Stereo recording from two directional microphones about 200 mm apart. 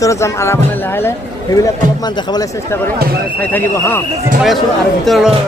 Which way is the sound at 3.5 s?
10° left (ahead or behind).